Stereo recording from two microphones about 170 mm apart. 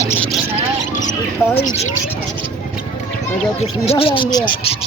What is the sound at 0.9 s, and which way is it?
Mouse, 45° left (ahead or behind).